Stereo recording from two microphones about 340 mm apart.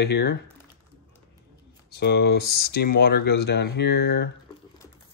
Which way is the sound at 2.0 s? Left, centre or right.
Left.